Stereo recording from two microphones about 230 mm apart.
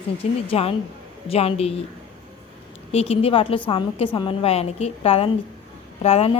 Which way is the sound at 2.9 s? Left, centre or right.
Left.